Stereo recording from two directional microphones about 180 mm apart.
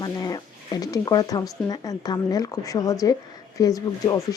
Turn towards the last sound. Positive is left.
turn(degrees=20)  # may be behind; listen again after turning